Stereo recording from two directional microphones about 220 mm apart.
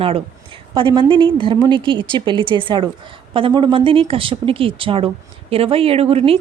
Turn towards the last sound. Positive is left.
turn(degrees=-25)  # may be behind; listen again after turning